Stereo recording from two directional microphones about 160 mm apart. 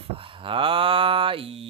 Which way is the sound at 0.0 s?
35° right (ahead or behind).